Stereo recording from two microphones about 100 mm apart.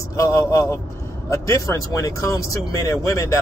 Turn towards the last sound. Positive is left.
turn(degrees=30)  # may be behind; listen again after turning